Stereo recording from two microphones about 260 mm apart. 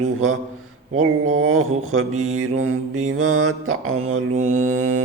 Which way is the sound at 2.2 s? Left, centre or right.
Right.